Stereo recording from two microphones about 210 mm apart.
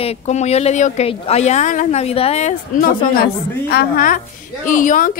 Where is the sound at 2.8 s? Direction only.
45° left (ahead or behind).